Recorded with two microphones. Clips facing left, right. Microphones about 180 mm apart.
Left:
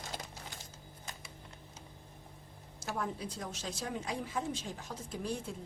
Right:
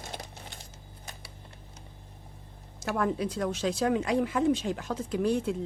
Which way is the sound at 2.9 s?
75° right (ahead or behind).